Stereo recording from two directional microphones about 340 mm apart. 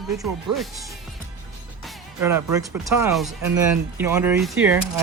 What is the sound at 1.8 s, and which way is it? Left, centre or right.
Music, centre.